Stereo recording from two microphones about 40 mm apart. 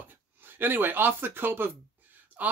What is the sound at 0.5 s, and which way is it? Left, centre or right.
Speech, right.